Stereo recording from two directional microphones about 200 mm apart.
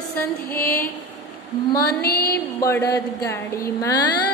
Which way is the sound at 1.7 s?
50° left (ahead or behind).